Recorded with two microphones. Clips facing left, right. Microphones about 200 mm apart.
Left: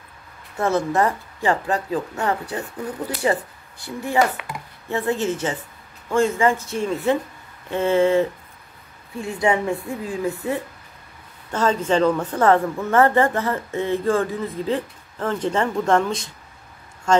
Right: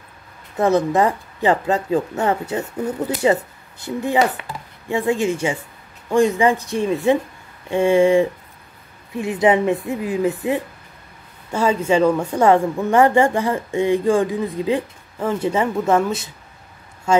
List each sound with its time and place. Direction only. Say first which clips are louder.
0.6 s a woman's voice: right 4 dB; 15° right (ahead or behind)
11.5 s a woman's voice: right 2 dB; 10° right (ahead or behind)